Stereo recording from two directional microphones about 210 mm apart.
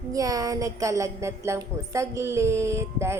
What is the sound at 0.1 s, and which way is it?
Speech, 15° right (ahead or behind).